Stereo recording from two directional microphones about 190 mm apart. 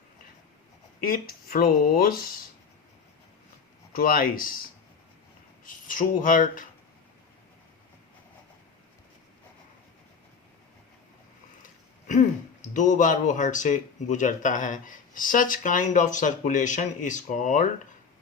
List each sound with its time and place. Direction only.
1.0 s speech: 50° left (ahead or behind)
3.9 s speech: 50° left (ahead or behind)
5.6 s speech: 45° left (ahead or behind)
11.6 s a sound: 40° left (ahead or behind)
12.7 s speech: 40° left (ahead or behind)